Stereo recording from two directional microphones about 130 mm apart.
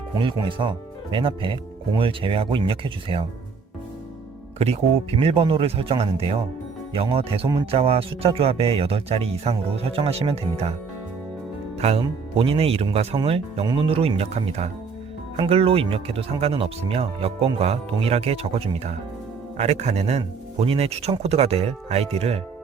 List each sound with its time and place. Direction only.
0.2 s speech: 40° right (ahead or behind)
4.5 s speech: 50° right (ahead or behind)
11.8 s speech: 45° right (ahead or behind)